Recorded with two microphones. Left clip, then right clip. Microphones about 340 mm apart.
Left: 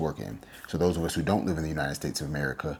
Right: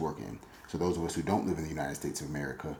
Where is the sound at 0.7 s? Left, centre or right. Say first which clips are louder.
Left 5 dB; left.